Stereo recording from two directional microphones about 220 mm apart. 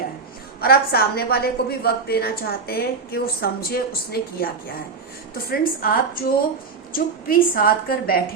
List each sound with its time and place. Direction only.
0.6 s a woman's voice: 45° left (ahead or behind)